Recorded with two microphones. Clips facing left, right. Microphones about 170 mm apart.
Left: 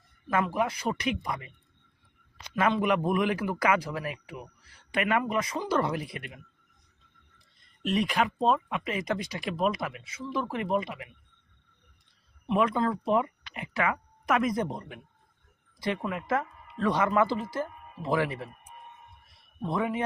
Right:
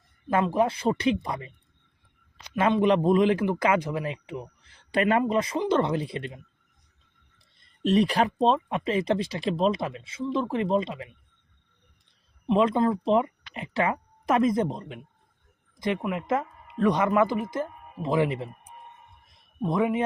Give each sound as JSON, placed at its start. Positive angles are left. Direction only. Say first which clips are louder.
{"t": 0.3, "sound": "speech", "louder": "right 4 dB", "side_deg": -30}
{"t": 2.6, "sound": "speech", "louder": "right 4 dB", "side_deg": -25}
{"t": 7.9, "sound": "speech", "louder": "right 5 dB", "side_deg": -35}
{"t": 12.5, "sound": "speech", "louder": "right 4 dB", "side_deg": -25}
{"t": 16.0, "sound": "speech", "louder": "right 3 dB", "side_deg": -20}
{"t": 19.6, "sound": "speech", "louder": "right 5 dB", "side_deg": -20}